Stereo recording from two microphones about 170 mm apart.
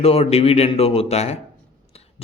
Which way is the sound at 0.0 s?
35° left (ahead or behind).